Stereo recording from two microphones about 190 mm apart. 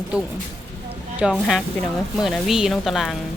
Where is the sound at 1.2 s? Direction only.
5° right (ahead or behind).